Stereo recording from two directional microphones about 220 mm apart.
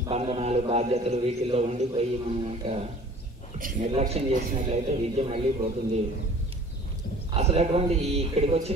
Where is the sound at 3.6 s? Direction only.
40° right (ahead or behind).